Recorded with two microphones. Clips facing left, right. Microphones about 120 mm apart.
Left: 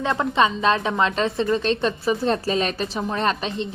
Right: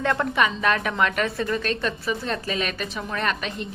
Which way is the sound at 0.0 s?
20° left (ahead or behind).